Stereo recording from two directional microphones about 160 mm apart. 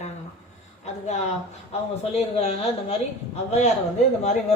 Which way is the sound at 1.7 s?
40° left (ahead or behind).